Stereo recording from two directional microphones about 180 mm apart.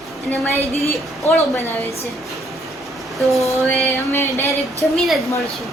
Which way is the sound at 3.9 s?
15° left (ahead or behind).